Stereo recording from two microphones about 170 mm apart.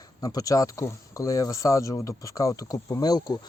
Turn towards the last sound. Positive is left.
turn(degrees=25)  # may be behind; listen again after turning